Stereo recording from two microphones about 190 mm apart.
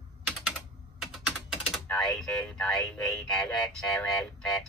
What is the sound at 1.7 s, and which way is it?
Speech, 5° left (ahead or behind).